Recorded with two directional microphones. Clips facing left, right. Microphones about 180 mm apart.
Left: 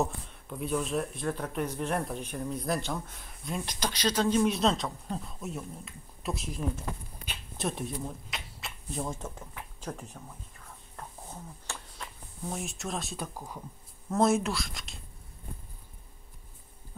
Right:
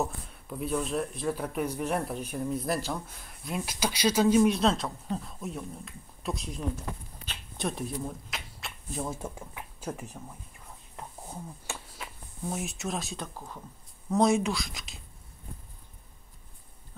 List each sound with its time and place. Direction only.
0.0 s speech: centre (ahead or behind)
11.0 s a sound: 15° right (ahead or behind)
11.9 s speech: 5° right (ahead or behind)